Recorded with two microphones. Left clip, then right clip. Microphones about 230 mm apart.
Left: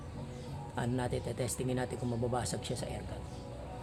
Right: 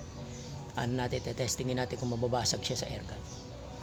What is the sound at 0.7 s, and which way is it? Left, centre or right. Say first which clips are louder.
Speech: right 2 dB; centre.